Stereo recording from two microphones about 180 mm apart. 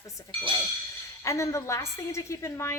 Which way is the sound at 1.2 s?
15° left (ahead or behind).